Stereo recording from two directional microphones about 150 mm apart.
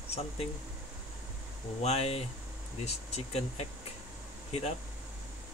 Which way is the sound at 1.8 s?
40° left (ahead or behind).